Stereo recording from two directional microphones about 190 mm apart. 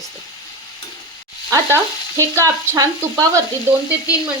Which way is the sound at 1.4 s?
15° right (ahead or behind).